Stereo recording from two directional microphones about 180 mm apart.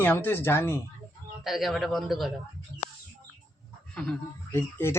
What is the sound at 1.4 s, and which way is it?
Speech, centre (ahead or behind).